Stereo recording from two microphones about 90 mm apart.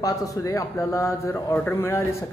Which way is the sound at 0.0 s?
40° left (ahead or behind).